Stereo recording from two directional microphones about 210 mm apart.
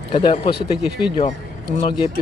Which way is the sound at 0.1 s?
25° left (ahead or behind).